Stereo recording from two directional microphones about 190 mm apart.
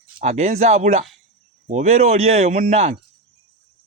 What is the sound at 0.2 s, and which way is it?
Speech, 35° right (ahead or behind).